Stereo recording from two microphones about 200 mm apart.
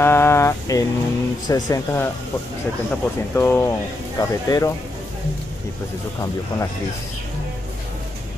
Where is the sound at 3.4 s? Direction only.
15° left (ahead or behind).